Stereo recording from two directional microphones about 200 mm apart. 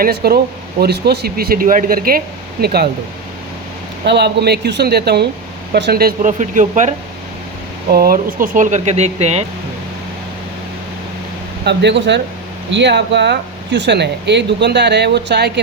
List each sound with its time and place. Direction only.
0.0 s speech: 50° right (ahead or behind)
4.0 s speech: 60° right (ahead or behind); by 9.4 s 35° right (ahead or behind)
11.6 s speech: 60° right (ahead or behind)